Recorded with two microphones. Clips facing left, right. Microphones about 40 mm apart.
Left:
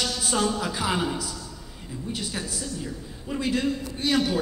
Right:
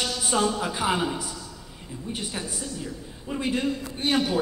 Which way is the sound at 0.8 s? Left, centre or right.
Centre.